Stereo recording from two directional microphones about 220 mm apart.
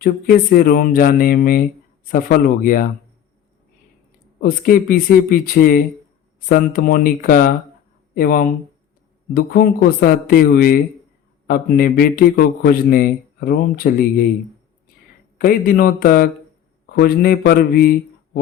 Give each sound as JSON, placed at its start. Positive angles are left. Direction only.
{"t": 0.0, "sound": "a man's voice", "side_deg": 40}
{"t": 4.4, "sound": "a man's voice", "side_deg": 40}
{"t": 15.4, "sound": "a man's voice", "side_deg": 40}